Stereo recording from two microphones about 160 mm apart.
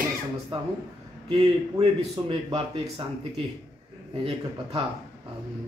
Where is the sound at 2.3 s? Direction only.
35° right (ahead or behind).